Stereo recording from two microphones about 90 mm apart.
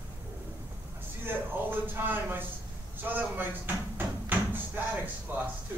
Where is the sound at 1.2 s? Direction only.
25° right (ahead or behind).